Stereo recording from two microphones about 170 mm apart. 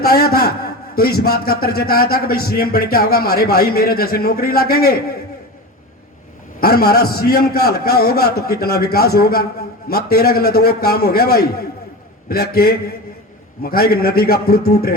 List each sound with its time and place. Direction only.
0.0 s a man's voice: 65° left (ahead or behind)
6.6 s a man's voice: 65° left (ahead or behind)